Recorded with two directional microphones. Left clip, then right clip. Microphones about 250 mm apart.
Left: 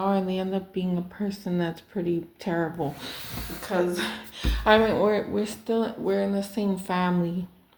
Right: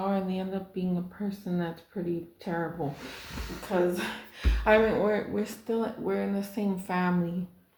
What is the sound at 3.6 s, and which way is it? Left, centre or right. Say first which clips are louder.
Speech: left 2 dB; left.